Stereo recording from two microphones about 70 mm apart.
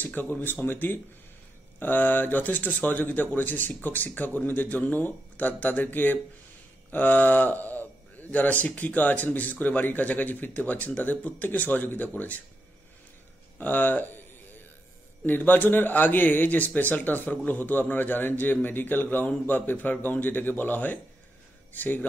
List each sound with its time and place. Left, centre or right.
0.0 s speech: left
13.6 s speech: left
15.2 s speech: left